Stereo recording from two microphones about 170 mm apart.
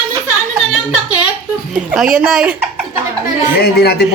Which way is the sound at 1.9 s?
5° right (ahead or behind).